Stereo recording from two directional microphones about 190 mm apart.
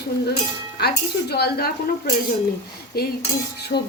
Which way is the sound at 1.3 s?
55° left (ahead or behind).